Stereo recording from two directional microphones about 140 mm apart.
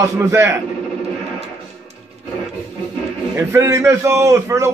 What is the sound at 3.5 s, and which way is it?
A man's voice, 20° right (ahead or behind).